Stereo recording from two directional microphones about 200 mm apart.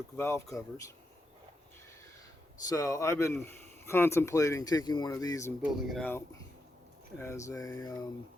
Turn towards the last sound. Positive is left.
turn(degrees=15)  # may be behind; listen again after turning